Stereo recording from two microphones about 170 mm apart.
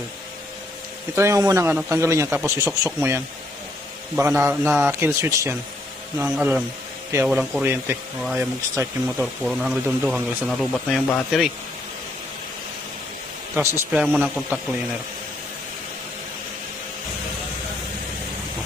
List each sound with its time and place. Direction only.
1.1 s a man's voice: 15° right (ahead or behind)
4.2 s a man's voice: 15° right (ahead or behind)
9.1 s speech: centre (ahead or behind)
13.6 s a man's voice: 15° right (ahead or behind)